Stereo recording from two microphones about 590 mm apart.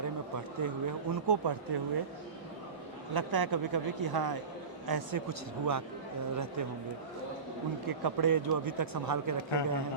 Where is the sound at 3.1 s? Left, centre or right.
Right.